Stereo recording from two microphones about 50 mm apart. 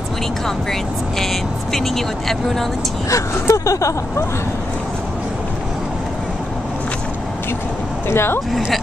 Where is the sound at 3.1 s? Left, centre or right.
Left.